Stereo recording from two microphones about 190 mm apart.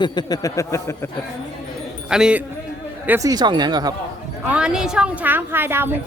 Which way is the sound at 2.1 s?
5° right (ahead or behind).